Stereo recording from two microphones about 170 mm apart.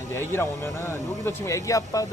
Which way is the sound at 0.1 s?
15° left (ahead or behind).